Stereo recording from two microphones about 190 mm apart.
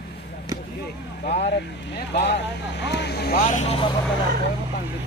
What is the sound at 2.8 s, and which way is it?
Speech, 65° left (ahead or behind).